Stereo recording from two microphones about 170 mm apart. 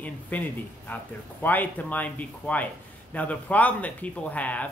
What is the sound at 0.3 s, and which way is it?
Speech, 10° left (ahead or behind).